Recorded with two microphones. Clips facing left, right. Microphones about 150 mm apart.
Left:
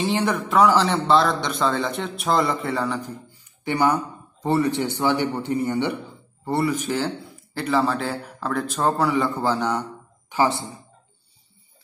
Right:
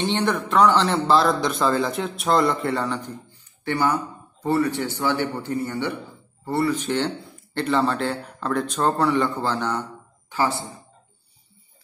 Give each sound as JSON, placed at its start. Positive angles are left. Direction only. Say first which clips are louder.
{"t": 0.0, "sound": "a man's voice", "louder": "even", "side_deg": 5}
{"t": 3.3, "sound": "speech", "louder": "right 1 dB", "side_deg": 15}
{"t": 7.5, "sound": "a man's voice", "louder": "even", "side_deg": 0}